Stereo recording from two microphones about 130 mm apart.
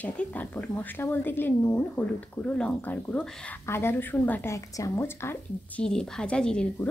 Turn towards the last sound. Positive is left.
turn(degrees=5)  # may be behind; listen again after turning